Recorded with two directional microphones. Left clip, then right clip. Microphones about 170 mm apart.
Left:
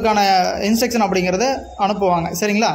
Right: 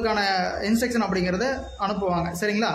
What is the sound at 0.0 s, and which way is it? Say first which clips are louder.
A man's voice: left 8 dB; 35° left (ahead or behind).